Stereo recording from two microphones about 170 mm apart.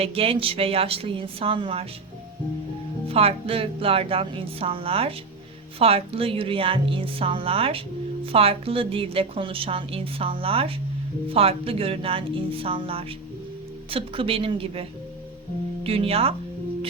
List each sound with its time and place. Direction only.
0.0 s a woman's voice: 35° right (ahead or behind)
3.1 s a woman's voice: 35° right (ahead or behind)